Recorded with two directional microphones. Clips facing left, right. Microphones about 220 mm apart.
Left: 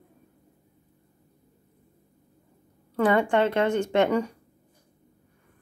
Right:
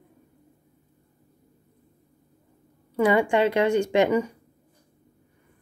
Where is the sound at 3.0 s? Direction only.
10° right (ahead or behind).